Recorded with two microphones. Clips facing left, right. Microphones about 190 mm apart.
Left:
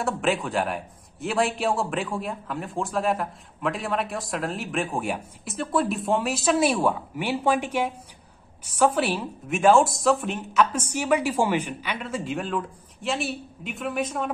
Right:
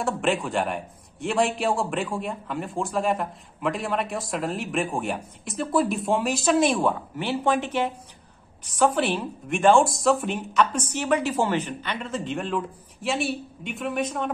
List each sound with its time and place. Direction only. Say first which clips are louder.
0.0 s a man's voice: even; centre (ahead or behind)